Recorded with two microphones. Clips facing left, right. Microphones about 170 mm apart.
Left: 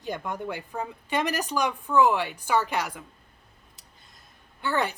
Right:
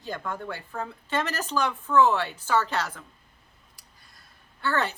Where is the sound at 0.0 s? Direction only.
15° left (ahead or behind).